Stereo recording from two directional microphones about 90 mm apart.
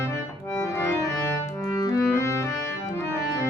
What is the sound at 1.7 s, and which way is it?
Clarinet, 35° left (ahead or behind).